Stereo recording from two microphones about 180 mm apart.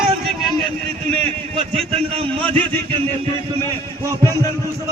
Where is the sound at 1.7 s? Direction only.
30° right (ahead or behind).